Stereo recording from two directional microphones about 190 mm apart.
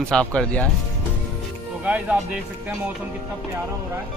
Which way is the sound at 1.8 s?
5° right (ahead or behind).